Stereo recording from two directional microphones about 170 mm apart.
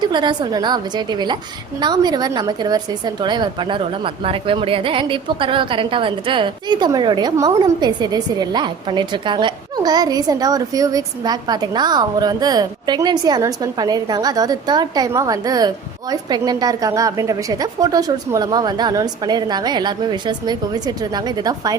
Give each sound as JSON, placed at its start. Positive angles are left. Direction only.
{"t": 0.0, "sound": "a woman's voice", "side_deg": -25}